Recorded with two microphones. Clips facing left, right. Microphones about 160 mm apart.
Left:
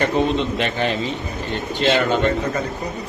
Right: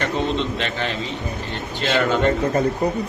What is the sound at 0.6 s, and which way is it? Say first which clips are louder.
Speech: left 4 dB; 15° left (ahead or behind).